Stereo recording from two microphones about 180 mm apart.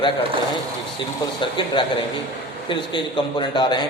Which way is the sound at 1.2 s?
20° left (ahead or behind).